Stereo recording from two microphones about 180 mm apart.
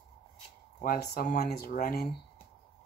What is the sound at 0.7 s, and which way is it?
Speech, 55° left (ahead or behind).